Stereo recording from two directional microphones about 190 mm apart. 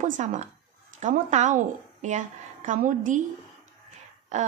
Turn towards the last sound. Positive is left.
turn(degrees=-40)  # may be behind; listen again after turning